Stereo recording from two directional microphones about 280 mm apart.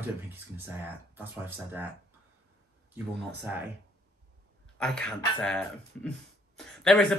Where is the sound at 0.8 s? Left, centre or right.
Centre.